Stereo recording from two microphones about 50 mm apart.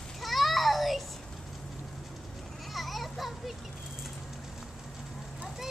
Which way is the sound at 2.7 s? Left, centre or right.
Centre.